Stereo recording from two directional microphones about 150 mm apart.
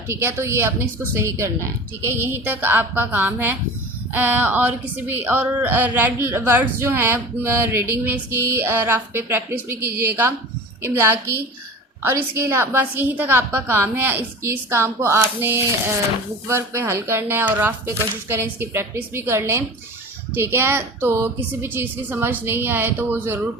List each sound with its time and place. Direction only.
0.1 s a woman's voice: 15° right (ahead or behind)